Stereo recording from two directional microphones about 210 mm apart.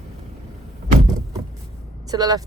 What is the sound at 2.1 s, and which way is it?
Speech, 20° right (ahead or behind).